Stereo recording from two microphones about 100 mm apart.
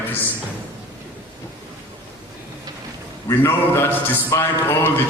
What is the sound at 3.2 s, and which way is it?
A man's voice, 25° left (ahead or behind).